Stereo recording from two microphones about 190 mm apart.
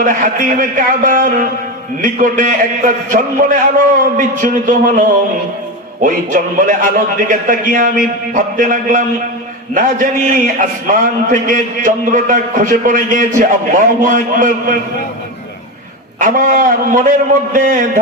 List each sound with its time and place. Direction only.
0.0 s a man's voice: 45° right (ahead or behind)
16.2 s a man's voice: 45° right (ahead or behind)